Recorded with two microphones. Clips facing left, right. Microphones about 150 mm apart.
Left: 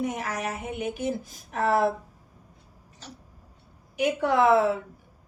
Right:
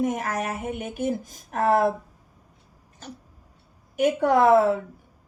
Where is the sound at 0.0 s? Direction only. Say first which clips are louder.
Right 4 dB; 50° right (ahead or behind).